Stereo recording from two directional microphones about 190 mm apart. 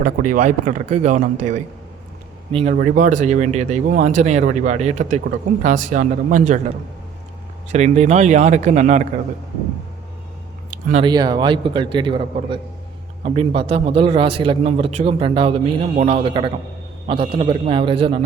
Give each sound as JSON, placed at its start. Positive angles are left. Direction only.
{"t": 0.0, "sound": "speech", "side_deg": -45}
{"t": 2.5, "sound": "speech", "side_deg": -30}
{"t": 2.7, "sound": "speech", "side_deg": -45}
{"t": 10.7, "sound": "a sound", "side_deg": -45}
{"t": 11.0, "sound": "a man's voice", "side_deg": -20}